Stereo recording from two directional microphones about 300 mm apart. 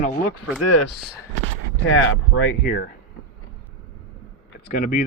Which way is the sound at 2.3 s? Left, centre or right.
Left.